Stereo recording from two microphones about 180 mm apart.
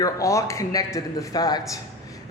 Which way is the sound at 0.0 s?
15° left (ahead or behind).